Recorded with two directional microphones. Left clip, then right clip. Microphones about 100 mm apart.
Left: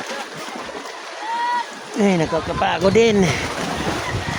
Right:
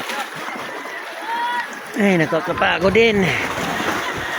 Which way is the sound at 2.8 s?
25° left (ahead or behind).